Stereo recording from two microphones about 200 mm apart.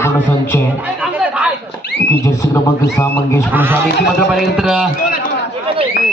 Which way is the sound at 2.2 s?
15° left (ahead or behind).